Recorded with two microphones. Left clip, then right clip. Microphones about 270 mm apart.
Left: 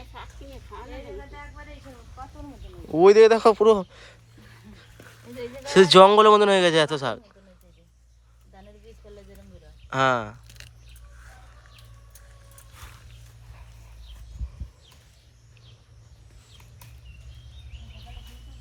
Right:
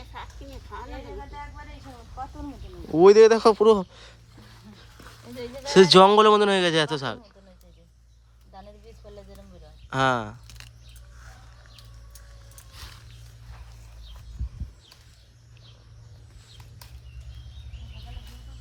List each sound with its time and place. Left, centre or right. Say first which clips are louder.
0.1 s speech: right 3 dB; centre
9.9 s speech: left 1 dB; centre
10.4 s squish: even; right